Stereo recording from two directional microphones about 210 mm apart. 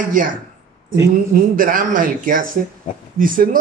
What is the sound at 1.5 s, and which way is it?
Speech, 40° right (ahead or behind).